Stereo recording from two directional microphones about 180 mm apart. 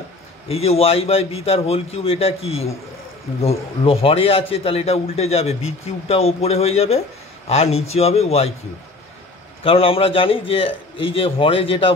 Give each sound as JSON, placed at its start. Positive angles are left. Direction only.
{"t": 0.5, "sound": "a man's voice", "side_deg": 35}
{"t": 9.7, "sound": "a man's voice", "side_deg": 30}